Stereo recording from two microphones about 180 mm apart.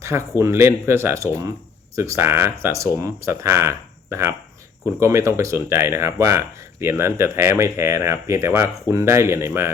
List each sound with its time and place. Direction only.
0.0 s speech: 15° right (ahead or behind)